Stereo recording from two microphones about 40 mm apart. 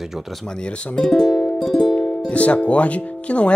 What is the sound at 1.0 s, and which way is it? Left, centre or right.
Speech, centre.